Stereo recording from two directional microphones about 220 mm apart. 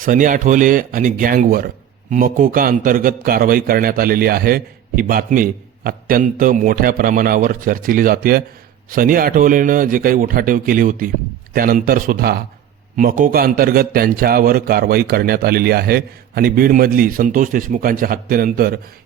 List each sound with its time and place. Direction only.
0.0 s a man's voice: 35° right (ahead or behind)